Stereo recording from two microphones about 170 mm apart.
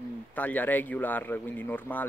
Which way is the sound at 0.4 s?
10° left (ahead or behind).